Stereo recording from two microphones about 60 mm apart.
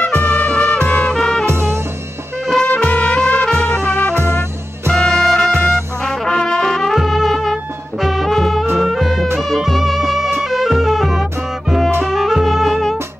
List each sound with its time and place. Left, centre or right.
0.0 s music: left
1.1 s music: centre
1.4 s music: right
2.6 s music: left
4.9 s music: centre
6.0 s brass instrument: centre
8.0 s music: centre